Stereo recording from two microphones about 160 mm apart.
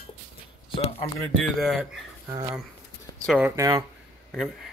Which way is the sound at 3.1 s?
25° left (ahead or behind).